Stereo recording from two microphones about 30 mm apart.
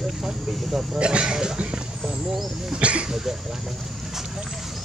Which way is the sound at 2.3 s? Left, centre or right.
Centre.